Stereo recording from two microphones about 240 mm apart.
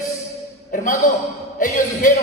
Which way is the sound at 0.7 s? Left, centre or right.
Left.